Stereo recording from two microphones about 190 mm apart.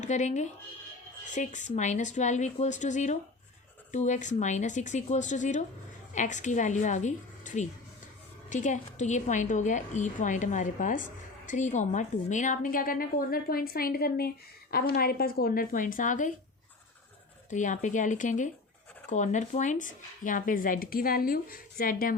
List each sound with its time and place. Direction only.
0.0 s a woman's voice: 40° left (ahead or behind)
17.5 s a woman's voice: 40° left (ahead or behind)